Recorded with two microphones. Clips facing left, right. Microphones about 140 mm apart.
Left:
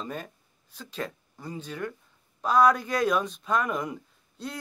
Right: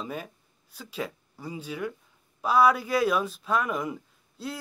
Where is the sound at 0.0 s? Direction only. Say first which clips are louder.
Right 1 dB; 5° right (ahead or behind).